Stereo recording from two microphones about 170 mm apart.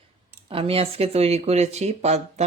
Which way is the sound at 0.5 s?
35° right (ahead or behind).